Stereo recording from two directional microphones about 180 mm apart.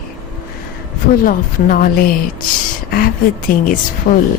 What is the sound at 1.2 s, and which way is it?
A woman's voice, 50° left (ahead or behind).